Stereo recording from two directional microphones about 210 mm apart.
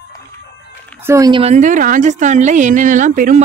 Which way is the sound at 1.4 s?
35° right (ahead or behind).